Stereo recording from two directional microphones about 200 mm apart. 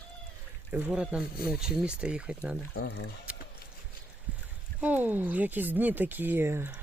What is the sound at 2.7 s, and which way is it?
Speech, 60° left (ahead or behind).